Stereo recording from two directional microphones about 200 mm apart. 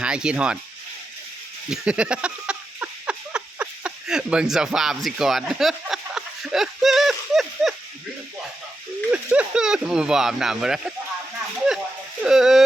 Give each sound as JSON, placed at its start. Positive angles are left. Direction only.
{"t": 0.0, "sound": "speech", "side_deg": -5}
{"t": 1.7, "sound": "a sound", "side_deg": -5}
{"t": 9.1, "sound": "speech", "side_deg": -5}
{"t": 12.2, "sound": "speech", "side_deg": 0}